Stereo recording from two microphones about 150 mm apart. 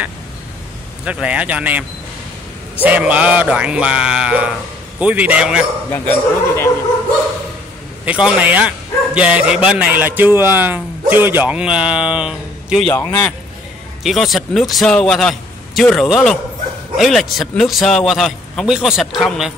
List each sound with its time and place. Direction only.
1.0 s a man's voice: 10° right (ahead or behind)
5.9 s speech: 15° left (ahead or behind)
8.0 s a man's voice: 5° right (ahead or behind)
12.9 s speech: 15° left (ahead or behind)
14.0 s a man's voice: centre (ahead or behind)